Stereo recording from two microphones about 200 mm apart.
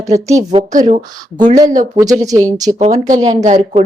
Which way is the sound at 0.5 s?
30° right (ahead or behind).